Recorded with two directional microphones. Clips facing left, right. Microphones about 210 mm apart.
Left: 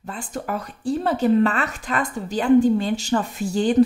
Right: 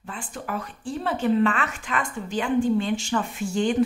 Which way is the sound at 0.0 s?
40° left (ahead or behind).